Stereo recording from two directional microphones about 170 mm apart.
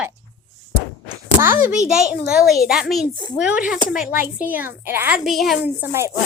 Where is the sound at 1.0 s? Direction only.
15° right (ahead or behind).